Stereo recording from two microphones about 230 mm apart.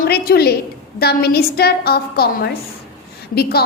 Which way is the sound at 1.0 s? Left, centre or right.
Left.